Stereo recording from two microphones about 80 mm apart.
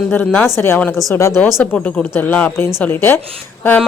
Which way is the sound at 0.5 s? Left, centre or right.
Left.